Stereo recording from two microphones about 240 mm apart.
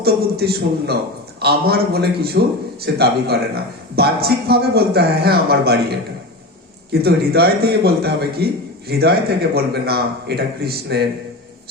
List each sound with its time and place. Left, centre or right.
0.0 s a man's voice: right
7.0 s a man's voice: right